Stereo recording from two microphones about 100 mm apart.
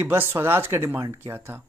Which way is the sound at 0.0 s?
25° right (ahead or behind).